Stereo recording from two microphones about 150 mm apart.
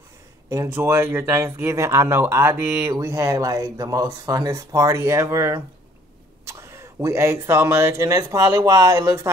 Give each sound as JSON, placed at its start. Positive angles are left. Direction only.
{"t": 0.5, "sound": "speech", "side_deg": -20}